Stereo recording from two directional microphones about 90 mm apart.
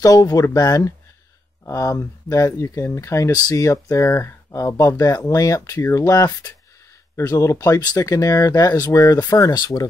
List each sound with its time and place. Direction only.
0.0 s speech: 40° left (ahead or behind)
6.1 s speech: 45° left (ahead or behind)